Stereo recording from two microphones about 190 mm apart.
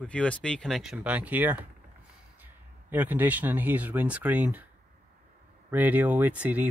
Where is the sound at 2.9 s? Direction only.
10° right (ahead or behind).